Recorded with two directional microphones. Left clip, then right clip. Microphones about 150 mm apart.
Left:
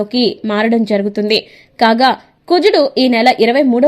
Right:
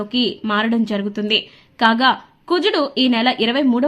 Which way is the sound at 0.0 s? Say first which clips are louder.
Left 5 dB; 30° left (ahead or behind).